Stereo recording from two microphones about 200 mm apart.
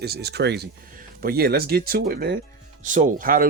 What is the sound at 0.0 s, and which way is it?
Speech, 55° right (ahead or behind).